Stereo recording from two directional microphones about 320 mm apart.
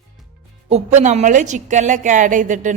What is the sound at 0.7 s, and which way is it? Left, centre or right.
A woman's voice, right.